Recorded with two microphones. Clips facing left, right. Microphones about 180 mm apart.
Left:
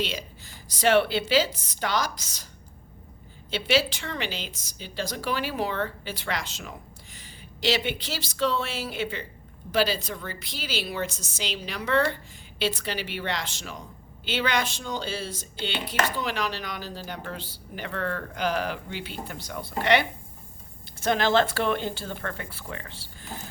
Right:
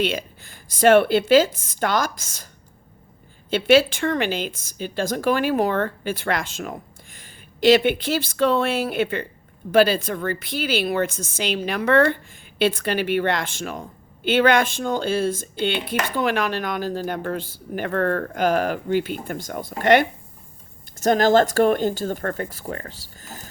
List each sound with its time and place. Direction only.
0.0 s speech: 55° right (ahead or behind)
3.5 s a woman's voice: 50° right (ahead or behind)